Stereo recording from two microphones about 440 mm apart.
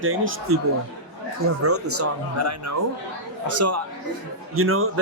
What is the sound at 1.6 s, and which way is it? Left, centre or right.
Speech, right.